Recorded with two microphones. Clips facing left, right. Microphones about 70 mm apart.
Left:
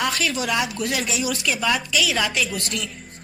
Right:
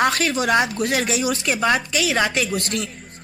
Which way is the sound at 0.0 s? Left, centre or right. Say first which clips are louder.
Right 4 dB; right.